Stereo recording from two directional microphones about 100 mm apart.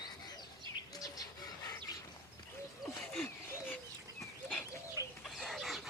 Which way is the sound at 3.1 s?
15° left (ahead or behind).